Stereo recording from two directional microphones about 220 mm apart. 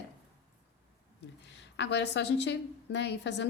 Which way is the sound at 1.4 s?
50° left (ahead or behind).